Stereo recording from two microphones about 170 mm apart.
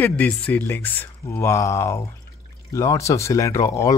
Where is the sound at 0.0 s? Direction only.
10° left (ahead or behind).